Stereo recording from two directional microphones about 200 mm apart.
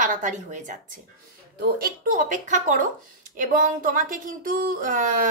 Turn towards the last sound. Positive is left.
turn(degrees=-40)  # may be behind; listen again after turning